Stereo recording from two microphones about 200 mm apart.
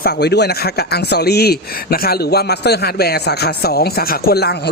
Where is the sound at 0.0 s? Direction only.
55° left (ahead or behind).